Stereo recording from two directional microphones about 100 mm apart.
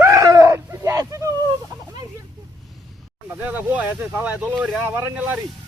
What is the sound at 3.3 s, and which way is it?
Speech, 15° right (ahead or behind).